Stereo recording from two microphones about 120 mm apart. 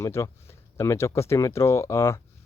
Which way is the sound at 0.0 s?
25° left (ahead or behind).